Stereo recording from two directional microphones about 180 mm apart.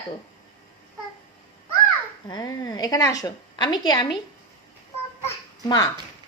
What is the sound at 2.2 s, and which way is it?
A woman's voice, 25° left (ahead or behind).